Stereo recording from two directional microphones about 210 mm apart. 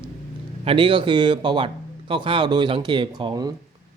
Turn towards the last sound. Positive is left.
turn(degrees=-20)  # may be behind; listen again after turning